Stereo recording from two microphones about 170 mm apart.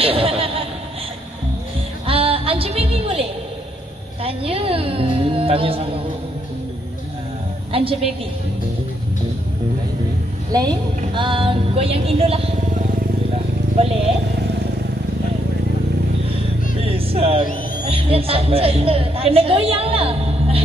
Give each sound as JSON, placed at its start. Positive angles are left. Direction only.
{"t": 0.0, "sound": "a sound", "side_deg": -35}
{"t": 2.0, "sound": "a sound", "side_deg": -35}
{"t": 4.2, "sound": "music", "side_deg": -35}
{"t": 7.7, "sound": "a sound", "side_deg": -35}
{"t": 10.5, "sound": "a woman's voice", "side_deg": -25}
{"t": 11.1, "sound": "music", "side_deg": -30}
{"t": 13.7, "sound": "speech", "side_deg": -35}
{"t": 16.8, "sound": "music", "side_deg": -35}
{"t": 17.8, "sound": "a woman's voice", "side_deg": -35}